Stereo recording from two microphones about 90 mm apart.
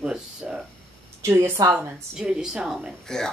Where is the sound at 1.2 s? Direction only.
30° right (ahead or behind).